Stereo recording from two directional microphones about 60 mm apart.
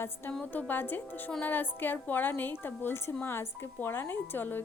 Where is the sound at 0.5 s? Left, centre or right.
Left.